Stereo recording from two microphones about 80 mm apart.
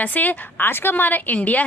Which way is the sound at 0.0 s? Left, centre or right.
Left.